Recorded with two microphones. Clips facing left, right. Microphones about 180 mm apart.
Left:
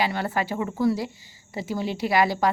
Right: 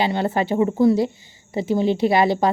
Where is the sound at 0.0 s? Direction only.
25° right (ahead or behind).